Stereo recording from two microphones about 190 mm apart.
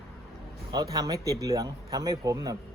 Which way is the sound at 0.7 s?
20° right (ahead or behind).